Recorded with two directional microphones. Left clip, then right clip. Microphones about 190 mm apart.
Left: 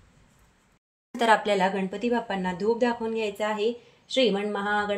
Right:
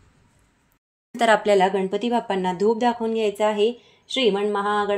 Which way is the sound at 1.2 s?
35° right (ahead or behind).